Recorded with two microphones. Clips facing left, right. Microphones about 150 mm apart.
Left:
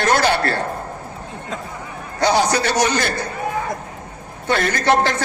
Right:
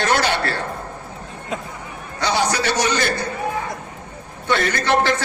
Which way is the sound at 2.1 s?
40° left (ahead or behind).